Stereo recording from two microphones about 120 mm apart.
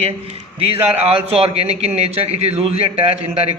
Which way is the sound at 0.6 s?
55° right (ahead or behind).